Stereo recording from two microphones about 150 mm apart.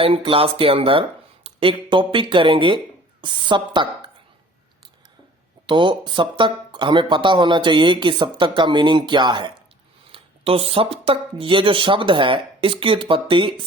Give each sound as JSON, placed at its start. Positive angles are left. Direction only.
{"t": 0.0, "sound": "speech", "side_deg": -40}
{"t": 5.6, "sound": "speech", "side_deg": -30}